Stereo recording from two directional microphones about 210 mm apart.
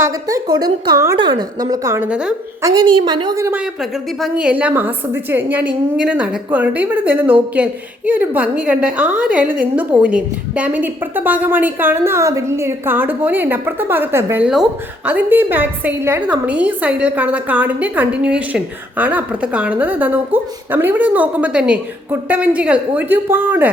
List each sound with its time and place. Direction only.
0.0 s a woman's voice: 15° right (ahead or behind)
2.6 s a woman's voice: 20° right (ahead or behind)